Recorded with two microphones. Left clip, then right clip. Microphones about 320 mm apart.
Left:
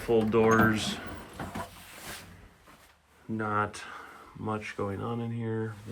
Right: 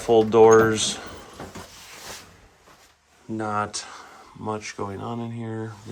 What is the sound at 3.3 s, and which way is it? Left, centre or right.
Speech, centre.